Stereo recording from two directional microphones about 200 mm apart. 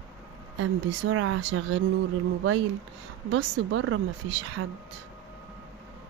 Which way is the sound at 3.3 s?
70° right (ahead or behind).